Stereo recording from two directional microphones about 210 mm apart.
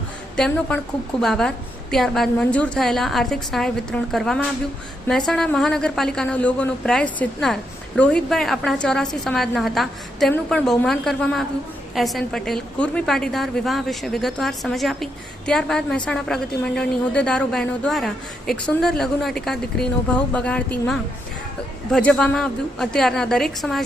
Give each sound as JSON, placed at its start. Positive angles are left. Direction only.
{"t": 0.3, "sound": "a woman's voice", "side_deg": 5}